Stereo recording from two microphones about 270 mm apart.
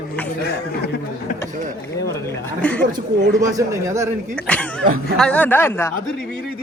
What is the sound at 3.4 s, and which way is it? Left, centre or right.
Speech, centre.